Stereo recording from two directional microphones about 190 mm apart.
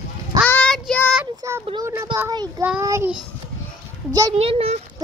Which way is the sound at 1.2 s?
15° right (ahead or behind).